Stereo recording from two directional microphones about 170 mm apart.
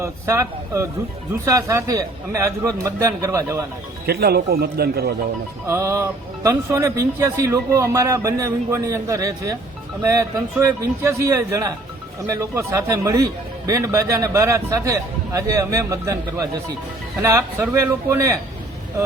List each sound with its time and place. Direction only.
0.0 s speech: 15° right (ahead or behind)
4.0 s speech: 70° right (ahead or behind)
5.6 s a man's voice: 15° right (ahead or behind)